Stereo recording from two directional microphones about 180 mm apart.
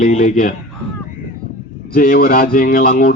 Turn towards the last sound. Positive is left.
turn(degrees=50)  # may be behind; listen again after turning